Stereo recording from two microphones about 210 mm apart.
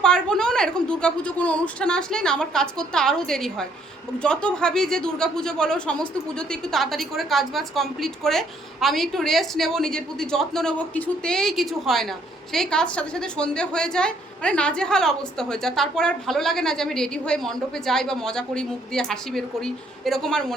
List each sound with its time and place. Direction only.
0.0 s a woman's voice: 5° left (ahead or behind)